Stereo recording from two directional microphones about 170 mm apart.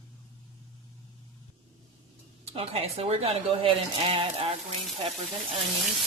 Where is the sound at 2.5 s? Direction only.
35° right (ahead or behind).